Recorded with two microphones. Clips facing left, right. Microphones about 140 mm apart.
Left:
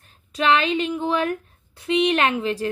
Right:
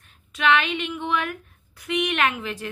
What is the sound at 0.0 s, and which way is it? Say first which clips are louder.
A woman's voice: left 2 dB; 35° left (ahead or behind).